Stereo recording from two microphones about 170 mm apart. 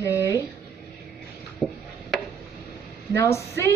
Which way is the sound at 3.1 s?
15° left (ahead or behind).